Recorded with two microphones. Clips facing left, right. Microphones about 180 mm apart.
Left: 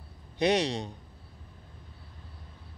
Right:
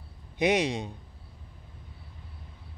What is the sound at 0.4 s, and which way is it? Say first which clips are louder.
Speech: right 1 dB; 15° right (ahead or behind).